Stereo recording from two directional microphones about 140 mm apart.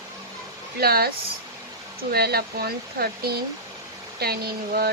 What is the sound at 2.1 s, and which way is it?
Speech, 90° right.